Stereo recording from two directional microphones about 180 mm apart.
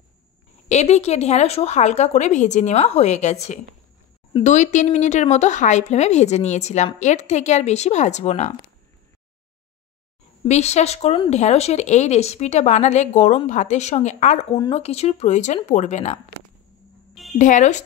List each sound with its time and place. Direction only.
0.7 s speech: 40° left (ahead or behind)
10.4 s speech: 35° left (ahead or behind)
17.1 s music: centre (ahead or behind)
17.4 s speech: 45° left (ahead or behind)